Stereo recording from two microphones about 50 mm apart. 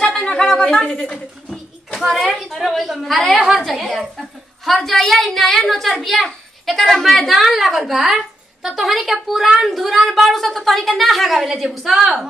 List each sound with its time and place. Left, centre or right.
0.1 s a woman's voice: centre
1.5 s a sound: centre
2.0 s a woman's voice: centre